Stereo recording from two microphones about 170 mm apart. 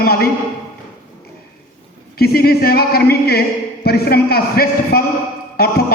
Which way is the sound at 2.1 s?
65° left (ahead or behind).